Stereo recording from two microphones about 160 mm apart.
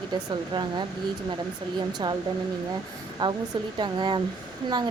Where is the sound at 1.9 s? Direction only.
25° right (ahead or behind).